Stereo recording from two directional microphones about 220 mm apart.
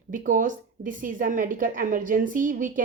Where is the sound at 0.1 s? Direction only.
35° right (ahead or behind).